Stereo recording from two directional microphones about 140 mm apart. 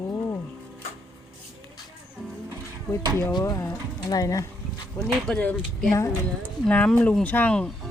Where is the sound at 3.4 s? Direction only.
20° left (ahead or behind).